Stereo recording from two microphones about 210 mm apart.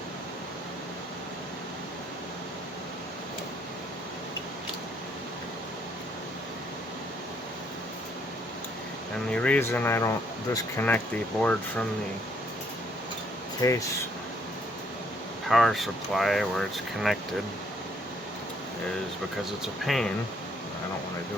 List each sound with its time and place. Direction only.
9.3 s speech: 5° left (ahead or behind)
13.6 s speech: 15° left (ahead or behind)
15.4 s speech: centre (ahead or behind)
19.6 s speech: centre (ahead or behind)